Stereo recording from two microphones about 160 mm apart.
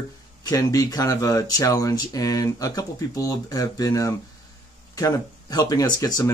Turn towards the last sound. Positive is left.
turn(degrees=25)  # may be behind; listen again after turning